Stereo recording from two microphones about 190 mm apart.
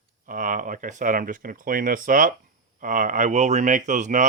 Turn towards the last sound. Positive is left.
turn(degrees=-40)  # may be behind; listen again after turning